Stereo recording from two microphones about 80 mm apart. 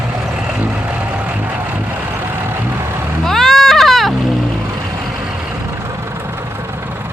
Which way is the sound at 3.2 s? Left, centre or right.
Centre.